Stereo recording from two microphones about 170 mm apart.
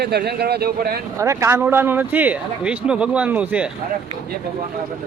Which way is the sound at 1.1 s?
15° right (ahead or behind).